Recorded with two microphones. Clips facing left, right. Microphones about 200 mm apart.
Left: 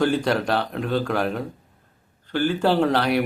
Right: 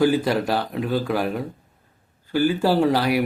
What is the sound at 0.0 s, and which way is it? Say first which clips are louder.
A man's voice: right 2 dB; 5° right (ahead or behind).